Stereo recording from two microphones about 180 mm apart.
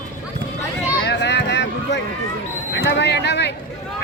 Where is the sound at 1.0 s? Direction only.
75° left (ahead or behind).